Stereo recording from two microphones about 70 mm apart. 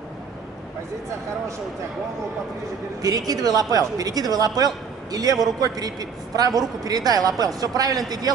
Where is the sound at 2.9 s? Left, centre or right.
Right.